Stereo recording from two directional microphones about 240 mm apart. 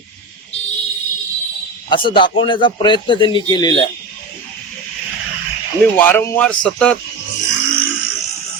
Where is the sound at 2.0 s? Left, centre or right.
Centre.